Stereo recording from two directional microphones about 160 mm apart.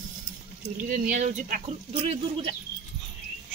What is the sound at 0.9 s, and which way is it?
Speech, 50° right (ahead or behind).